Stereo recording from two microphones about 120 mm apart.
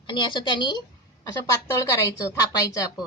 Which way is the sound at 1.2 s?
30° left (ahead or behind).